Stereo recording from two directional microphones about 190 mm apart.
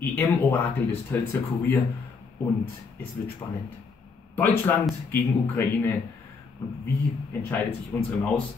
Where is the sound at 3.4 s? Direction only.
20° left (ahead or behind).